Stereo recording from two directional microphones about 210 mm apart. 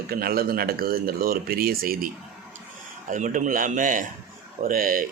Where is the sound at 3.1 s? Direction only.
40° right (ahead or behind).